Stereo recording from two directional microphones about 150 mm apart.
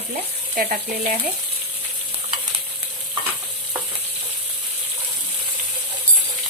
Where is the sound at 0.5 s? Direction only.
60° right (ahead or behind).